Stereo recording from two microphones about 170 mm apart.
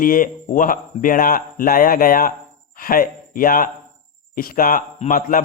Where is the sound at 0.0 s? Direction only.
55° left (ahead or behind).